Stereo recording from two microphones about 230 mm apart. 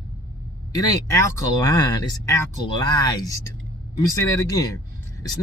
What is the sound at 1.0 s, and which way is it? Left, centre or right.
Speech, centre.